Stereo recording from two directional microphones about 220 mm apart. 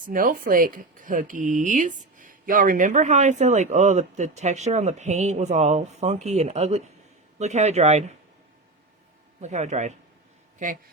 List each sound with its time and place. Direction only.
0.1 s speech: 40° right (ahead or behind)
9.4 s speech: 30° right (ahead or behind)